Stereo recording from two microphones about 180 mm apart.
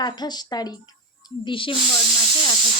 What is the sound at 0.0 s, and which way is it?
A woman's voice, 25° left (ahead or behind).